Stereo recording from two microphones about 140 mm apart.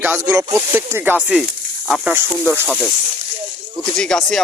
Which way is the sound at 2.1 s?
15° right (ahead or behind).